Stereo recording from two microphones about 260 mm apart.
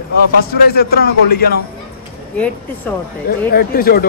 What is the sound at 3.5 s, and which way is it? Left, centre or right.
Speech, left.